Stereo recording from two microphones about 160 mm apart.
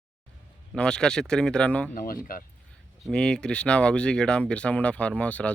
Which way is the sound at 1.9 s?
65° left (ahead or behind).